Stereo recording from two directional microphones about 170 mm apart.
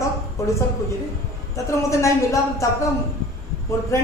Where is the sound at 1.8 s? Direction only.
15° left (ahead or behind).